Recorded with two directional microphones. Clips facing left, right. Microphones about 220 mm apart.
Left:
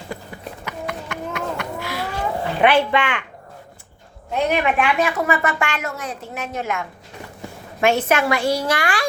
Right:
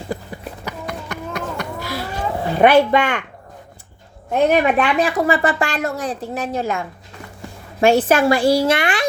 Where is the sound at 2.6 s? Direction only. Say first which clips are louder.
Right 5 dB; 40° right (ahead or behind).